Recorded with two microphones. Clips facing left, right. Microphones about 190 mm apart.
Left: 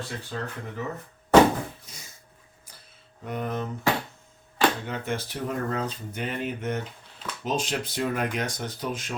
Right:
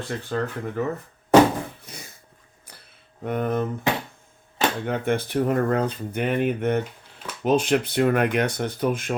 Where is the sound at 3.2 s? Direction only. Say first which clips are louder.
Right 6 dB; 55° right (ahead or behind).